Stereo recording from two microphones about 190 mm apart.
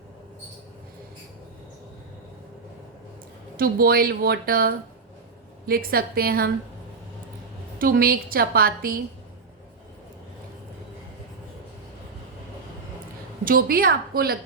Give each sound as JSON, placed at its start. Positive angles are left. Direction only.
{"t": 3.6, "sound": "a woman's voice", "side_deg": -50}
{"t": 7.8, "sound": "a woman's voice", "side_deg": -50}
{"t": 13.4, "sound": "a woman's voice", "side_deg": -50}